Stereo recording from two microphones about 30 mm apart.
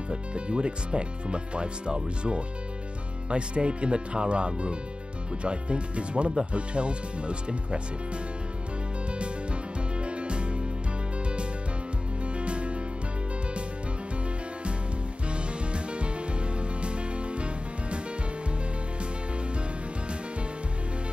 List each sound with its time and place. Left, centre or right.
0.1 s speech: right
9.9 s music: right
12.4 s music: right
15.2 s music: right